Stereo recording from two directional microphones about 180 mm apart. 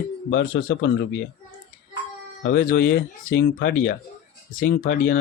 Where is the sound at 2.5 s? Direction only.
55° left (ahead or behind); by 3.7 s 70° left (ahead or behind).